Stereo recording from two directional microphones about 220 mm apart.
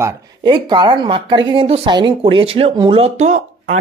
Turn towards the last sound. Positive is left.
turn(degrees=-30)  # may be behind; listen again after turning